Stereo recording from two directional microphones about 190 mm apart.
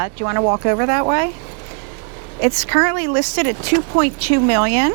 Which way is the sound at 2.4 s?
15° right (ahead or behind).